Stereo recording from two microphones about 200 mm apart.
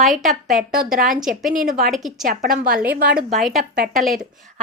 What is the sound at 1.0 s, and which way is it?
Speech, 40° right (ahead or behind).